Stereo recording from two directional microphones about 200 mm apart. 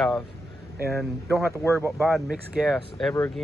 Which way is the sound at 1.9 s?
Centre (ahead or behind).